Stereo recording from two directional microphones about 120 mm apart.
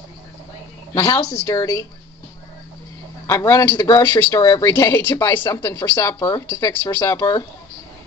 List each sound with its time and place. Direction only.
0.9 s speech: 25° left (ahead or behind)
3.3 s speech: 20° left (ahead or behind)